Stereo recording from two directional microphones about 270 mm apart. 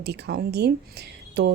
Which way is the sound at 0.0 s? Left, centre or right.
Right.